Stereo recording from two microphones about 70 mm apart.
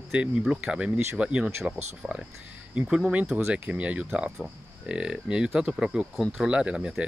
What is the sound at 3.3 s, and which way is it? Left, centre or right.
Speech, centre.